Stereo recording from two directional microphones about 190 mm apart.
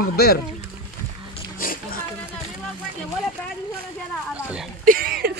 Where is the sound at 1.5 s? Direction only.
45° left (ahead or behind).